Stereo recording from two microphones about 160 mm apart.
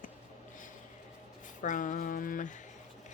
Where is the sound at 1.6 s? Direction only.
55° left (ahead or behind).